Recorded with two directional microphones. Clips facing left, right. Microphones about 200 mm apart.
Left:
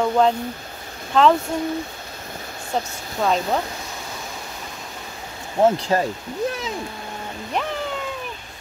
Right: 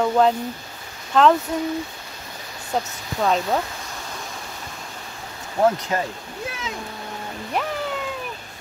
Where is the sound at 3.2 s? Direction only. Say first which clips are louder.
Even; centre (ahead or behind).